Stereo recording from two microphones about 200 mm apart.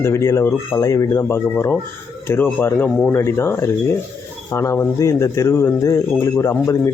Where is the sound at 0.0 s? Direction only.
15° left (ahead or behind).